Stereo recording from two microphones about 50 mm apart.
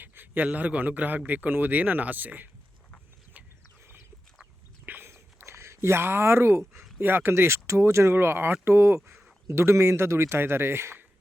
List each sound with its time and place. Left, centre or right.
0.0 s a sound: right
0.4 s speech: right
4.9 s a sound: right
7.0 s a man's voice: right
8.1 s speech: right
8.6 s a man's voice: right